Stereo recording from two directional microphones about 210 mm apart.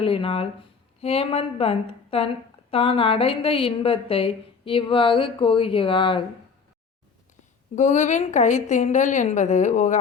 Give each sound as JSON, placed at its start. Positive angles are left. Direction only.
{"t": 0.0, "sound": "a woman's voice", "side_deg": 25}
{"t": 7.8, "sound": "a woman's voice", "side_deg": 35}